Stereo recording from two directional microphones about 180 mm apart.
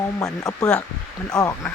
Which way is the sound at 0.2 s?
20° left (ahead or behind).